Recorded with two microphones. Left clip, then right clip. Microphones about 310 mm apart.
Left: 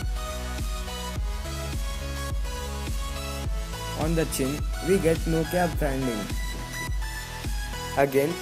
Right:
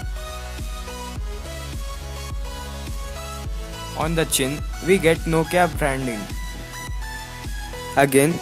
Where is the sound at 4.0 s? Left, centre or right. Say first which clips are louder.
Right 5 dB; right.